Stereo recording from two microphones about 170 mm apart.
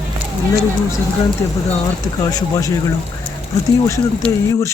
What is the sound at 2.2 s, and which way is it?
Speech, 20° left (ahead or behind).